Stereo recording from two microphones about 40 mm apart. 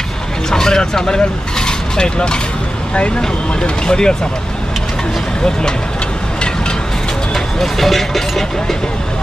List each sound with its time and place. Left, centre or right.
0.5 s speech: centre
3.6 s speech: left
5.4 s speech: centre
7.3 s speech: centre